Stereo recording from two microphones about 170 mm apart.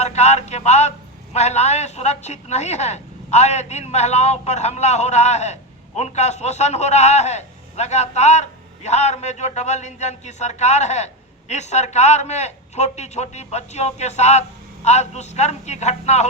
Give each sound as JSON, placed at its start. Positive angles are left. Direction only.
{"t": 0.0, "sound": "a man's voice", "side_deg": 40}